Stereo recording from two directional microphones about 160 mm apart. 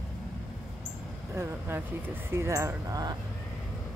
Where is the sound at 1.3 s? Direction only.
15° right (ahead or behind).